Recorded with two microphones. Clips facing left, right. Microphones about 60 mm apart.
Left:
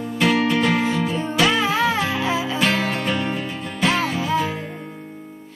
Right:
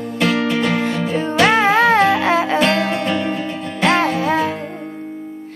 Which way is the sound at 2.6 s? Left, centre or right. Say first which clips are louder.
Right 4 dB; centre.